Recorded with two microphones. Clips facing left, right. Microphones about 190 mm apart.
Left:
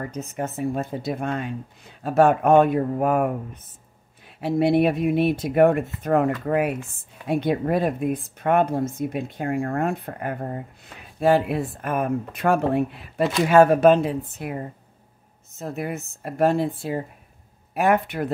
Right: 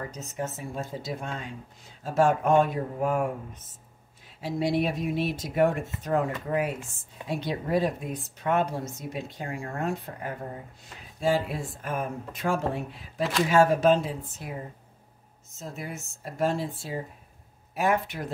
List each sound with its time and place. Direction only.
0.1 s speech: 55° left (ahead or behind)